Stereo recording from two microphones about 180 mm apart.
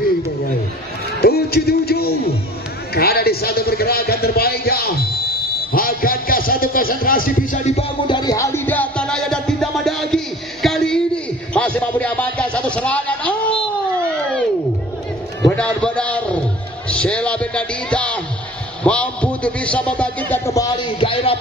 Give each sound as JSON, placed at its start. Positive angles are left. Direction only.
{"t": 1.2, "sound": "a sound", "side_deg": 60}
{"t": 5.7, "sound": "a man's voice", "side_deg": 55}
{"t": 8.1, "sound": "music", "side_deg": 20}
{"t": 11.5, "sound": "speech", "side_deg": 5}
{"t": 15.4, "sound": "a man's voice", "side_deg": 5}